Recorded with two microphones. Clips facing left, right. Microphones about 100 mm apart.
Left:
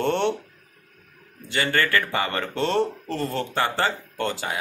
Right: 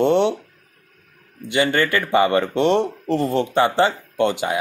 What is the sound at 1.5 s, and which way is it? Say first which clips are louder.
Speech: right 4 dB; 20° right (ahead or behind).